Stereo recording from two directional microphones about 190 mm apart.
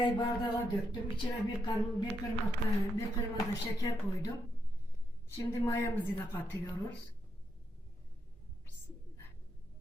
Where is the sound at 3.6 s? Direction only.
20° left (ahead or behind).